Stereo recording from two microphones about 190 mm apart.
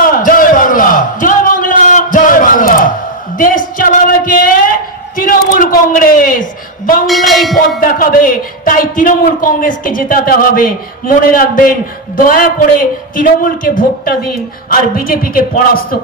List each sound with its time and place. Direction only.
0.1 s a sound: 45° left (ahead or behind)
3.3 s a man's voice: 45° left (ahead or behind)
7.1 s speech: centre (ahead or behind)
7.8 s a man's voice: 45° left (ahead or behind)